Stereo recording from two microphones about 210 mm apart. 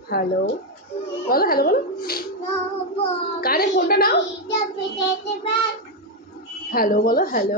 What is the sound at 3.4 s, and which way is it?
Speech, 50° left (ahead or behind).